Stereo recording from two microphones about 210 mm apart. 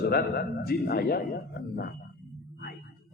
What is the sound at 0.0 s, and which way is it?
A man's voice, 45° left (ahead or behind).